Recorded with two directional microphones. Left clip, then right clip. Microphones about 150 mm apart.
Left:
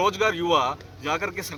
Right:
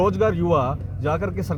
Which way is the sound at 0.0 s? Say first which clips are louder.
Right 2 dB; 35° right (ahead or behind).